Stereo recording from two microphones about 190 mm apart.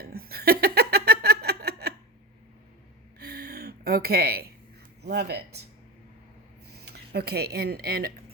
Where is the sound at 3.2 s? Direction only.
55° right (ahead or behind).